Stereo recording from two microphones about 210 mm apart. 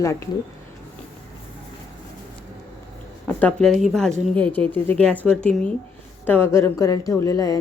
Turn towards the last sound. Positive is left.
turn(degrees=15)  # may be behind; listen again after turning